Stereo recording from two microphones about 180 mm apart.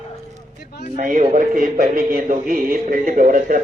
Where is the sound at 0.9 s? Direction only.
50° right (ahead or behind).